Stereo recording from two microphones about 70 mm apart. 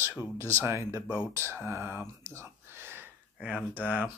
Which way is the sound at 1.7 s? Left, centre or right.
Right.